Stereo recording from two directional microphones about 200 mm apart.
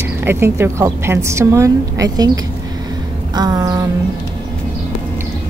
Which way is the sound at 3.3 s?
20° right (ahead or behind).